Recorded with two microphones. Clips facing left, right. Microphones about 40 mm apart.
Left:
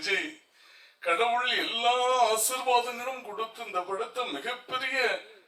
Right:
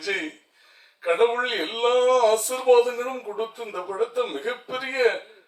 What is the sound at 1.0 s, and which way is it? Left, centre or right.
Speech, right.